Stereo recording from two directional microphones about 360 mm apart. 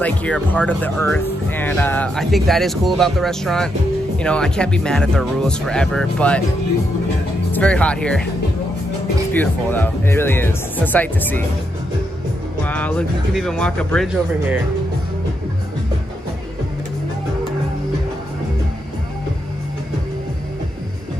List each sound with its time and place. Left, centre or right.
0.0 s speech: centre
7.5 s speech: centre
9.3 s speech: centre
12.6 s speech: centre